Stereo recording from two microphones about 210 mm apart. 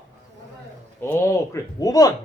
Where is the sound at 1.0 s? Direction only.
10° left (ahead or behind).